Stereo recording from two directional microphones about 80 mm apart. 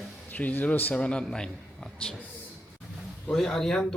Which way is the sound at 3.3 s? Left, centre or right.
Centre.